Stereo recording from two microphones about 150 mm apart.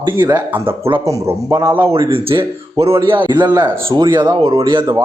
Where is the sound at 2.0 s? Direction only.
35° right (ahead or behind).